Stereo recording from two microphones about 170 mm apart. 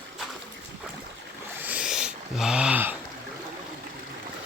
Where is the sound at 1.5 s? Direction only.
10° right (ahead or behind).